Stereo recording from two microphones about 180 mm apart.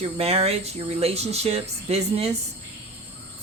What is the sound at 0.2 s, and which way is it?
Speech, 35° right (ahead or behind).